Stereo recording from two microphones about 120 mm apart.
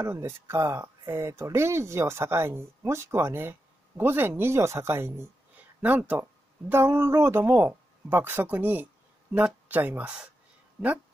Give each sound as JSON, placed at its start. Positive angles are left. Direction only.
{"t": 0.0, "sound": "speech", "side_deg": -25}